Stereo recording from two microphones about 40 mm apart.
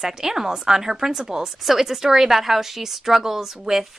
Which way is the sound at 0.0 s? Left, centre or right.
Centre.